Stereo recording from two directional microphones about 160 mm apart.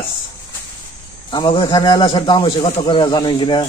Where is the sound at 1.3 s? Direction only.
30° left (ahead or behind).